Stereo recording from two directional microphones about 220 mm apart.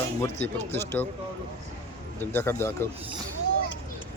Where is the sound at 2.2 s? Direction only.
10° left (ahead or behind).